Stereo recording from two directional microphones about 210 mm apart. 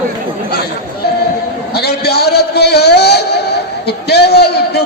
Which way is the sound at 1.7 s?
50° left (ahead or behind).